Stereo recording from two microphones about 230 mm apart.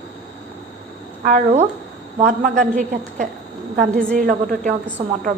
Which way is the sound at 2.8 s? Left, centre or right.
Right.